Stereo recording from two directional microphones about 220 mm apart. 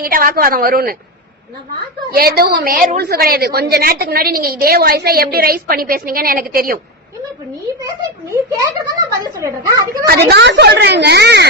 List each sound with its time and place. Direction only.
0.0 s a woman's voice: 40° right (ahead or behind)
2.0 s a woman's voice: 45° right (ahead or behind)
8.3 s a child's voice: 15° right (ahead or behind)
10.1 s a woman's voice: 45° right (ahead or behind)